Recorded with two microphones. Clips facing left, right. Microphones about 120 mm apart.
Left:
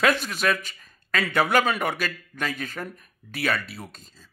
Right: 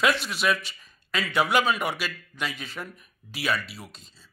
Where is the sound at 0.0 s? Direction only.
45° left (ahead or behind).